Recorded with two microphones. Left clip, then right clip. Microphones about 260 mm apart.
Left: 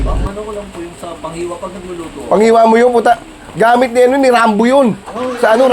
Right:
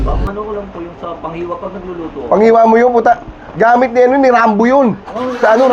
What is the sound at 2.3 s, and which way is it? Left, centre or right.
A man's voice, left.